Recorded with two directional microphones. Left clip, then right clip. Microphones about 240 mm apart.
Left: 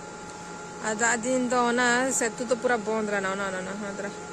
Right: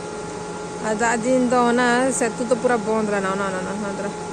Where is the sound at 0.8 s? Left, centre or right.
Centre.